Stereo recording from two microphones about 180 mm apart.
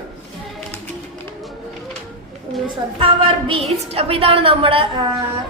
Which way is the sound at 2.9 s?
30° right (ahead or behind).